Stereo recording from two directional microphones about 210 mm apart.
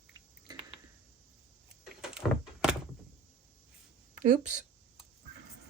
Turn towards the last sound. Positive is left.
turn(degrees=-35)  # may be behind; listen again after turning